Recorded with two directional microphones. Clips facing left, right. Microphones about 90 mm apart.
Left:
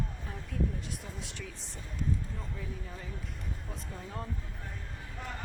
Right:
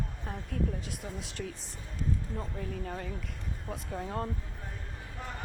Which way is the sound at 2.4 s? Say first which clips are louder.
Right 5 dB; 55° right (ahead or behind).